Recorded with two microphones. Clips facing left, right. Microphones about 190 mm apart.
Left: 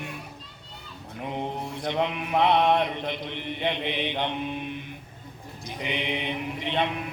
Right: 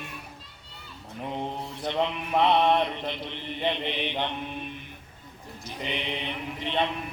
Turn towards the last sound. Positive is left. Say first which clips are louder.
# left 1 dB
turn(degrees=15)  # may be behind; listen again after turning